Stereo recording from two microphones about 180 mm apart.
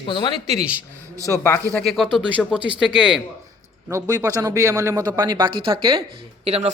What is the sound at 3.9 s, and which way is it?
A man's voice, 20° right (ahead or behind).